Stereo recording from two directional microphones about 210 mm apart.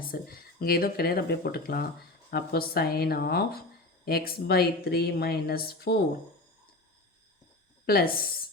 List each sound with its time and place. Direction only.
0.0 s speech: 45° left (ahead or behind)
7.9 s speech: 45° left (ahead or behind)